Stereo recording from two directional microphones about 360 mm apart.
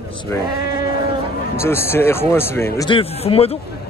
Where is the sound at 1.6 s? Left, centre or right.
Centre.